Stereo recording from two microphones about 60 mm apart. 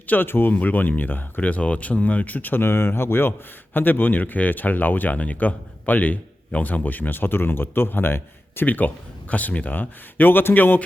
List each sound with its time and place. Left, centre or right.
0.1 s speech: left